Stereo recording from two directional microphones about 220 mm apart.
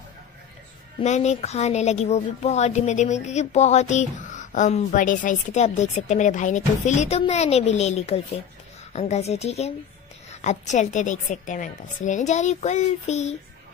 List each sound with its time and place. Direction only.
1.0 s a woman's voice: 30° left (ahead or behind)